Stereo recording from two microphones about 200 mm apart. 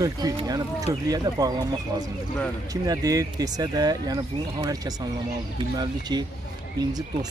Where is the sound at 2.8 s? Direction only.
15° right (ahead or behind).